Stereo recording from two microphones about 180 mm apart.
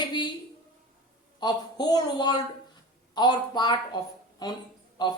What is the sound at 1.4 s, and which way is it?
Speech, 25° left (ahead or behind).